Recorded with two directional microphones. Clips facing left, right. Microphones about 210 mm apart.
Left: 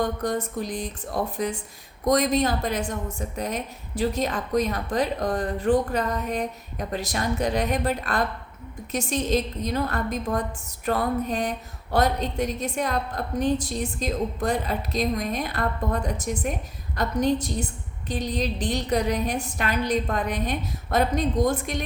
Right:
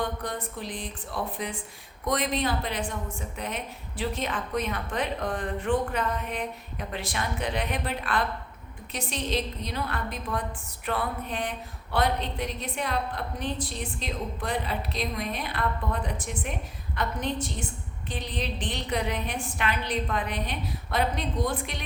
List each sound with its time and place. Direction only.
0.0 s a woman's voice: 45° left (ahead or behind)